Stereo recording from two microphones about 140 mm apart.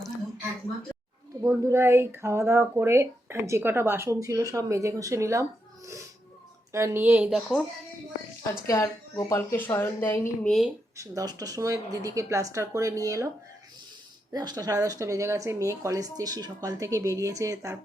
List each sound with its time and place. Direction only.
0.9 s a sound: 5° left (ahead or behind)
1.4 s speech: 25° right (ahead or behind)
7.3 s speech: centre (ahead or behind)
8.6 s speech: 25° left (ahead or behind)
10.4 s speech: centre (ahead or behind)
10.9 s speech: 25° right (ahead or behind)
14.3 s speech: 30° right (ahead or behind)